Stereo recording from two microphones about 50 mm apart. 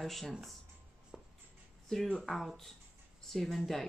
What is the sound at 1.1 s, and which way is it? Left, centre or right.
Music, centre.